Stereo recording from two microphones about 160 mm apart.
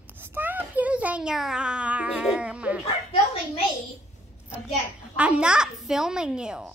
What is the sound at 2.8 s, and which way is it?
Speech, 40° left (ahead or behind).